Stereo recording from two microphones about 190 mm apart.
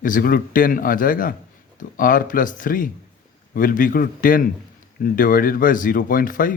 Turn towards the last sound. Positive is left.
turn(degrees=45)  # may be behind; listen again after turning